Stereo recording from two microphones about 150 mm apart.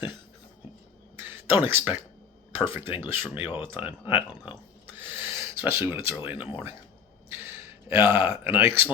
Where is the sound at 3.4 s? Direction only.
35° left (ahead or behind).